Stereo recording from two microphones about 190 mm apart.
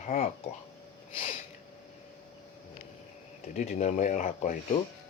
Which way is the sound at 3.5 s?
40° left (ahead or behind).